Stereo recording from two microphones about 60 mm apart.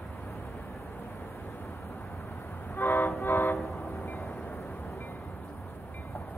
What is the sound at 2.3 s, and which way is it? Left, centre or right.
Train, left.